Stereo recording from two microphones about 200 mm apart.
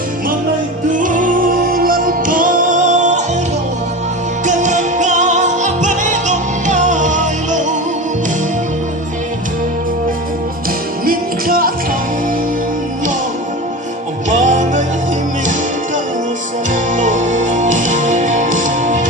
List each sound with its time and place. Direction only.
0.9 s music: 40° right (ahead or behind)
4.4 s music: 35° right (ahead or behind)
11.0 s music: 45° right (ahead or behind)
14.3 s music: 40° right (ahead or behind)
17.0 s music: 40° right (ahead or behind)